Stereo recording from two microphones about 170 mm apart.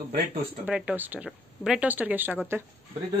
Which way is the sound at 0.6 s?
5° right (ahead or behind).